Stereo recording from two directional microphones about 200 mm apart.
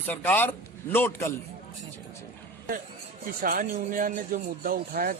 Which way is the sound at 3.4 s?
45° right (ahead or behind).